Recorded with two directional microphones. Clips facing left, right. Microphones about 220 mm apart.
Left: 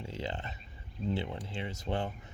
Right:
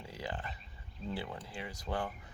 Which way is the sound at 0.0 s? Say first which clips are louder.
Left 3 dB; 25° left (ahead or behind).